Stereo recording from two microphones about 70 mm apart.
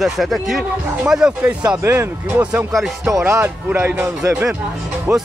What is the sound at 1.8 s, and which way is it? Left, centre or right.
Speech, right.